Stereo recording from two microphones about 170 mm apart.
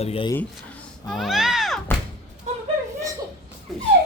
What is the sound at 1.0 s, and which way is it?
Speech, centre (ahead or behind).